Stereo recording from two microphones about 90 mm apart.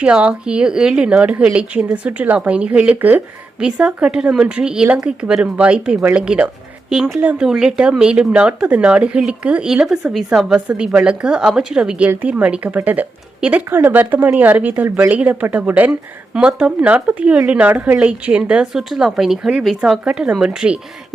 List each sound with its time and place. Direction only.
0.0 s speech: 15° right (ahead or behind)